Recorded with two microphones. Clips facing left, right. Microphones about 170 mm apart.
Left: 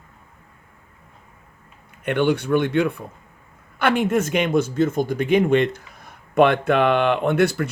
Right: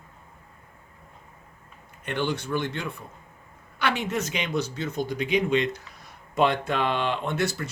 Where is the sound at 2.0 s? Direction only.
60° left (ahead or behind).